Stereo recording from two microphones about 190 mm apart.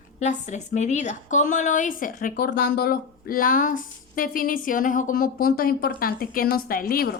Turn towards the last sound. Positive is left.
turn(degrees=50)  # may be behind; listen again after turning